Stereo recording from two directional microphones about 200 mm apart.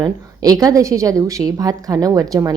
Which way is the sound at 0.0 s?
20° right (ahead or behind).